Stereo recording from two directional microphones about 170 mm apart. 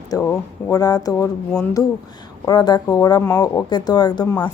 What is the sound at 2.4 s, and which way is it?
A woman's voice, 25° left (ahead or behind).